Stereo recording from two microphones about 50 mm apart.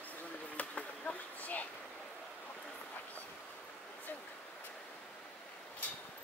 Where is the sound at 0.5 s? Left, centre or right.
Left.